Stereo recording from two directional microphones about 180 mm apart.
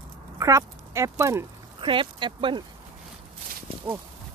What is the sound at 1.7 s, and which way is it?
Speech, 25° right (ahead or behind).